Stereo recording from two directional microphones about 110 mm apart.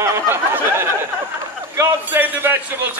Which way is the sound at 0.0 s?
25° right (ahead or behind).